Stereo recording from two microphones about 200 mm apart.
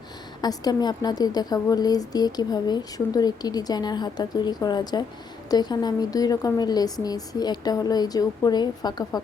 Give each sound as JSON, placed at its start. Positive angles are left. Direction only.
{"t": 0.4, "sound": "a woman's voice", "side_deg": 20}